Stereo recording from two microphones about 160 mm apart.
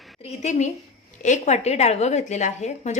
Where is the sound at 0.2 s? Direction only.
45° left (ahead or behind).